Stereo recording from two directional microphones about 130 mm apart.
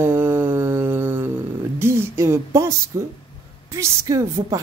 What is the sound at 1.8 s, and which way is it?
Speech, 20° right (ahead or behind).